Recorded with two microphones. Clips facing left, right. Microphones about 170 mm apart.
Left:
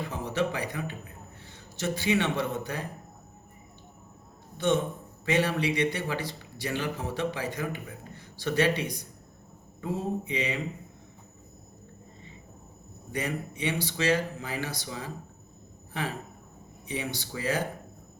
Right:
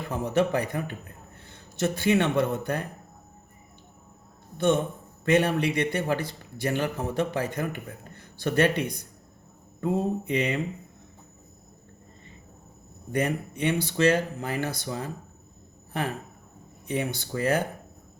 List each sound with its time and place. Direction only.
0.1 s a man's voice: 50° right (ahead or behind)
5.2 s a man's voice: 55° right (ahead or behind)
9.8 s mantra: 55° right (ahead or behind)
13.1 s a man's voice: 55° right (ahead or behind)